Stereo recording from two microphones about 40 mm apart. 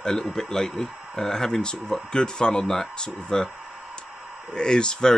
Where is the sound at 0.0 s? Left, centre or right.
Centre.